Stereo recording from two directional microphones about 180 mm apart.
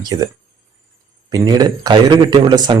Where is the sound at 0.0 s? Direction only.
20° right (ahead or behind).